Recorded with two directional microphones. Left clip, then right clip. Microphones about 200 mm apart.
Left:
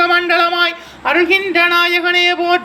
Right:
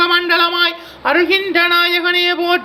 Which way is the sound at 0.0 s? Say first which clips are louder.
Left 1 dB; 20° right (ahead or behind).